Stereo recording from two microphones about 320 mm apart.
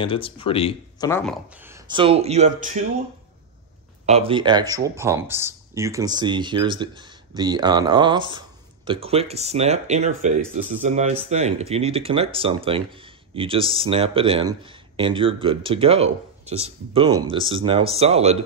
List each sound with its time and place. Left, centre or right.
0.0 s speech: centre
1.6 s speech: centre
4.0 s speech: centre